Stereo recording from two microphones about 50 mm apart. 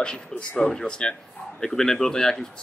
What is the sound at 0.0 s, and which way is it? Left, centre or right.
A man's voice, centre.